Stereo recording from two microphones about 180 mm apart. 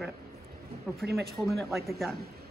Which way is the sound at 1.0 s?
60° right (ahead or behind).